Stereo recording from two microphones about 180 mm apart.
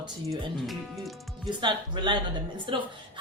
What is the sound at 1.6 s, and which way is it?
Speech, 25° right (ahead or behind).